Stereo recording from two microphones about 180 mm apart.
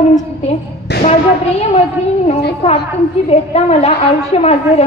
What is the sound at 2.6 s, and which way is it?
A woman's voice, 35° left (ahead or behind).